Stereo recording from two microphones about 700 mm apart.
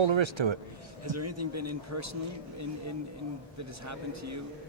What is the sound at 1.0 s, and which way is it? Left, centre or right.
A man's voice, right.